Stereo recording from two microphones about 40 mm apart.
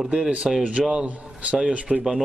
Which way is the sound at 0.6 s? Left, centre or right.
Right.